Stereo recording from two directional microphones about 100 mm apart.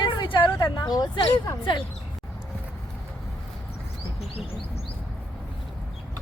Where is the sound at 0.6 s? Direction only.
40° left (ahead or behind).